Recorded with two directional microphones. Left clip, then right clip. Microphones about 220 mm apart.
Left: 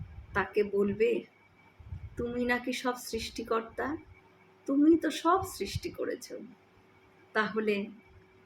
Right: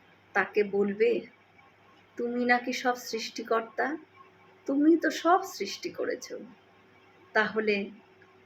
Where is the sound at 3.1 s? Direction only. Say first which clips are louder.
Right 2 dB; 25° left (ahead or behind).